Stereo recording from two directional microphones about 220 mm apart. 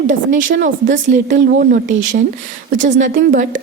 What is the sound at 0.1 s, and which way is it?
A woman's voice, 35° right (ahead or behind).